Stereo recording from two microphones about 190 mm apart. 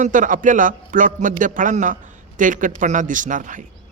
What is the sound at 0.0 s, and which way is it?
A man's voice, 45° right (ahead or behind).